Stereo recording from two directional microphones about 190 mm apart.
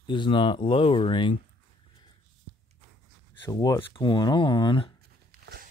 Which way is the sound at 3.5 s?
15° left (ahead or behind).